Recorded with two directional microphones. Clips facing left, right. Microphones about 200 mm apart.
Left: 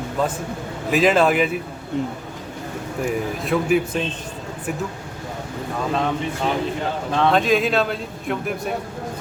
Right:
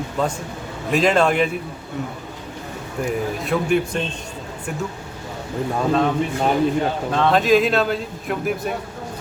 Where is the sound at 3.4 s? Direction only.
Centre (ahead or behind).